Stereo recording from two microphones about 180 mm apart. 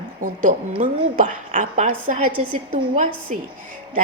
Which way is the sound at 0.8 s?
45° right (ahead or behind).